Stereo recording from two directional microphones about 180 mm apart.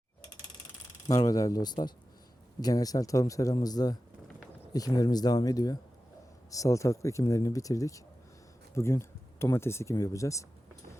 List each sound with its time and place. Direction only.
1.0 s a man's voice: 20° left (ahead or behind)